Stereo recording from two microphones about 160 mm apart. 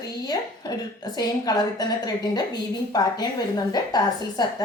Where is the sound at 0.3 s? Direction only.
25° left (ahead or behind).